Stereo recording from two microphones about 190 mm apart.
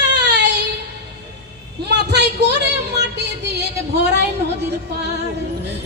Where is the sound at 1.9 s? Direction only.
65° right (ahead or behind).